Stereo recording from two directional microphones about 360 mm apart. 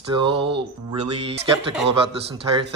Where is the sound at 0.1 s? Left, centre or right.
Centre.